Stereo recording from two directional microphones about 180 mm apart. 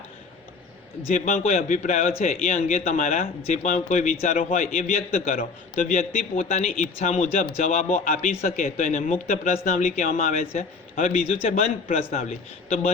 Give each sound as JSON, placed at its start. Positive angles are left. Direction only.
{"t": 1.1, "sound": "a man's voice", "side_deg": 40}